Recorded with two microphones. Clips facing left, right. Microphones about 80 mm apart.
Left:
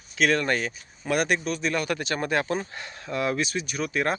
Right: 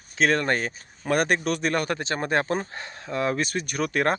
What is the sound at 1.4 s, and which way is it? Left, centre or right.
Speech, right.